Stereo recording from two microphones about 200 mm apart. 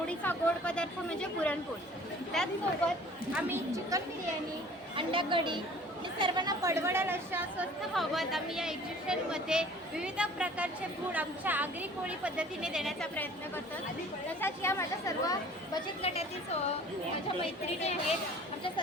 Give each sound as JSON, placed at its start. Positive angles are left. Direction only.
{"t": 0.1, "sound": "a woman's voice", "side_deg": 5}
{"t": 3.3, "sound": "a woman's voice", "side_deg": -10}
{"t": 7.9, "sound": "a woman's voice", "side_deg": 0}
{"t": 14.4, "sound": "speech", "side_deg": 15}
{"t": 16.0, "sound": "speech", "side_deg": 30}